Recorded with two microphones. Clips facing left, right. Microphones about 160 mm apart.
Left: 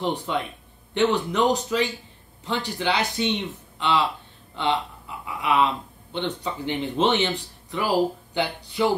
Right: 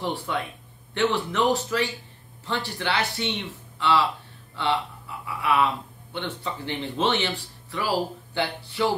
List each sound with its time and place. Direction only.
0.0 s speech: 20° left (ahead or behind)